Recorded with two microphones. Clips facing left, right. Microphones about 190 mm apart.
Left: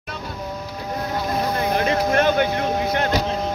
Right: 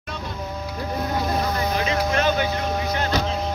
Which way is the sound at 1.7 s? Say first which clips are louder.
Left 3 dB; 55° left (ahead or behind).